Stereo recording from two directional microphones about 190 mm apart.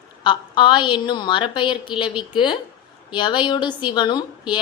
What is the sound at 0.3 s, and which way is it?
A woman's voice, 25° left (ahead or behind).